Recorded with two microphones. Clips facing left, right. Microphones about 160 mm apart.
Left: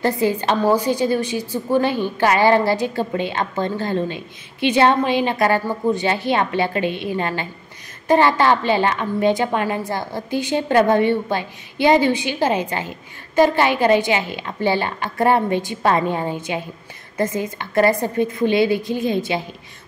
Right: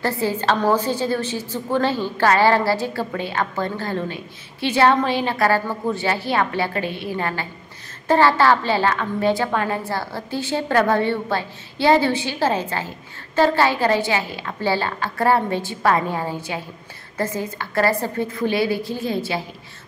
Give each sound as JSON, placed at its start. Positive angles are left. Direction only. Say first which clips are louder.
{"t": 0.0, "sound": "a woman's voice", "louder": "left 3 dB", "side_deg": 15}